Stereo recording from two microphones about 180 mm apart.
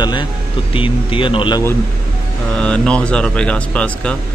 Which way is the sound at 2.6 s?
5° left (ahead or behind).